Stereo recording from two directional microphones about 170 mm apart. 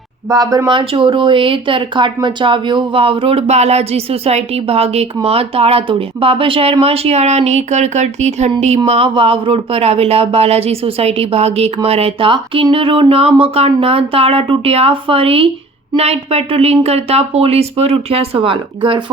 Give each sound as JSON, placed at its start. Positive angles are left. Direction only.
{"t": 0.3, "sound": "speech", "side_deg": -20}